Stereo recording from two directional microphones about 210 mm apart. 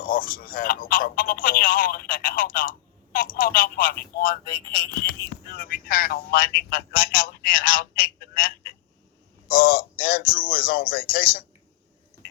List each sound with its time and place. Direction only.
0.0 s a man's voice: 40° left (ahead or behind)